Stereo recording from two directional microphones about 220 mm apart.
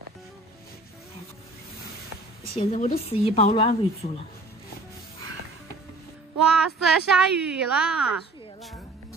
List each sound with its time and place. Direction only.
2.5 s a woman's voice: 25° left (ahead or behind)
6.4 s a woman's voice: centre (ahead or behind)